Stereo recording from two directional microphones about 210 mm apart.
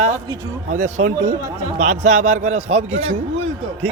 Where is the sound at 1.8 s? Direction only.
35° right (ahead or behind).